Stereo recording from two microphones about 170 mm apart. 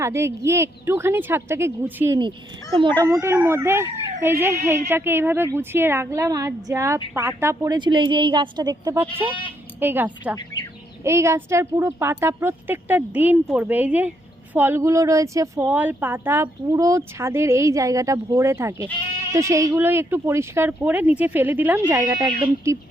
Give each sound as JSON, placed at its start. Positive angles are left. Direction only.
{"t": 0.0, "sound": "a woman's voice", "side_deg": -15}